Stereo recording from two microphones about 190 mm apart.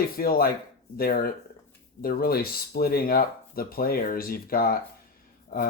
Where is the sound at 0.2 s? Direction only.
55° left (ahead or behind).